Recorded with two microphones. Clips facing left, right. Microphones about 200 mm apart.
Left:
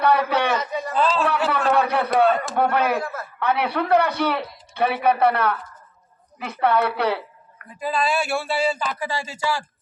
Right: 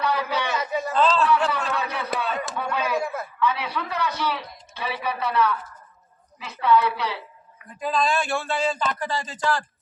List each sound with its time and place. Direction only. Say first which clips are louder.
0.0 s a man's voice: left 6 dB; 60° left (ahead or behind)
0.9 s speech: even; 10° left (ahead or behind)
1.5 s a sound: left 7 dB; 60° left (ahead or behind)
2.6 s a man's voice: left 3 dB; 60° left (ahead or behind)
3.0 s a sound: right 1 dB; 15° right (ahead or behind)
3.4 s a man's voice: left 4 dB; 60° left (ahead or behind)
7.8 s speech: left 1 dB; 5° left (ahead or behind)